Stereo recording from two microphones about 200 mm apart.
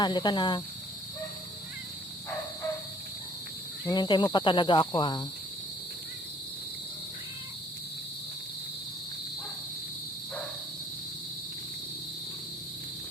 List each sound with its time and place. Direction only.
0.0 s speech: 20° left (ahead or behind)
3.8 s speech: 20° left (ahead or behind)